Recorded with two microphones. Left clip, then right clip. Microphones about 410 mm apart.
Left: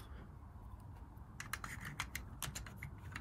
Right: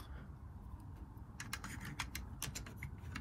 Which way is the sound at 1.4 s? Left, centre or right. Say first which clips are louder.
Left 1 dB; right.